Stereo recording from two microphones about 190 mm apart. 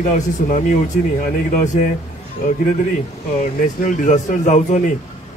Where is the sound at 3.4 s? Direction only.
40° left (ahead or behind).